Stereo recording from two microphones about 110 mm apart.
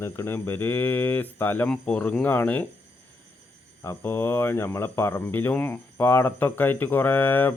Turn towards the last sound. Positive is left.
turn(degrees=20)  # may be behind; listen again after turning